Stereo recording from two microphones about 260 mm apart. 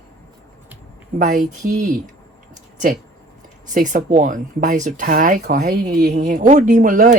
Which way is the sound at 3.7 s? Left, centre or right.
Right.